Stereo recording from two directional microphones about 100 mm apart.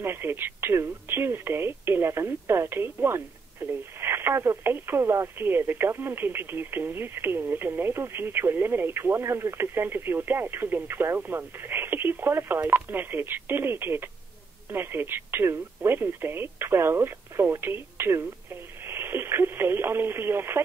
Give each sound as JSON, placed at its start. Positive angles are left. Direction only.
{"t": 0.0, "sound": "speech", "side_deg": -25}